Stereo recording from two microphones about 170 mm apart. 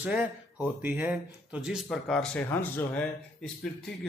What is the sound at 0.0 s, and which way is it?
Speech, 10° right (ahead or behind).